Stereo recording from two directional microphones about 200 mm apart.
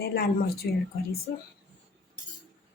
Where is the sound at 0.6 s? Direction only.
55° left (ahead or behind).